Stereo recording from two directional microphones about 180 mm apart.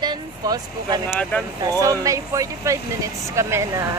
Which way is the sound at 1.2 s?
5° left (ahead or behind).